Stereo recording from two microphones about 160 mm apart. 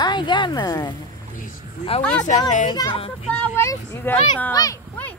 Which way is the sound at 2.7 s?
25° left (ahead or behind).